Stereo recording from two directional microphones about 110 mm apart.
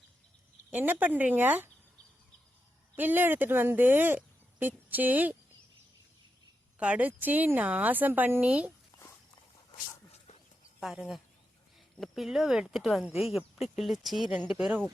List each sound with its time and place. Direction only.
0.7 s speech: 15° right (ahead or behind)
2.9 s speech: 15° right (ahead or behind)
6.7 s speech: 10° right (ahead or behind)
10.1 s a sound: 70° left (ahead or behind)
10.8 s speech: 5° right (ahead or behind)